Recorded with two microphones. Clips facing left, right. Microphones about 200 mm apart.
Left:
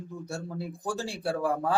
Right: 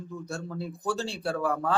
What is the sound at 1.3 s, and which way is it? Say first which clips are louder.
Speech: even; 35° left (ahead or behind).